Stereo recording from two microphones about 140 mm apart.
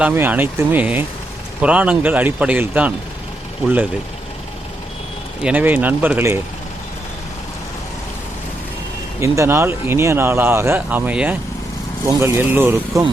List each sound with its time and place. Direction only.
0.0 s speech: 15° right (ahead or behind)
5.4 s speech: 10° right (ahead or behind)
9.2 s speech: 20° right (ahead or behind)